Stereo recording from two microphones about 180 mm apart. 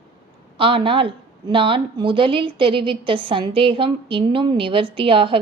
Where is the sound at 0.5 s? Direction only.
30° right (ahead or behind).